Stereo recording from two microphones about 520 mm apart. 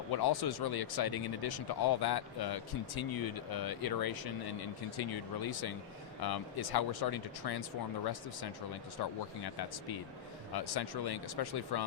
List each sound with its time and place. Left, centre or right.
0.1 s speech: left
9.4 s speech: left